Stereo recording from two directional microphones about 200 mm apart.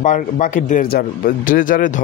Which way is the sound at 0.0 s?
40° left (ahead or behind).